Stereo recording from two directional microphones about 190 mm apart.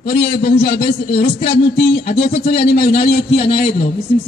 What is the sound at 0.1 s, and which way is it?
A man's voice, 50° left (ahead or behind).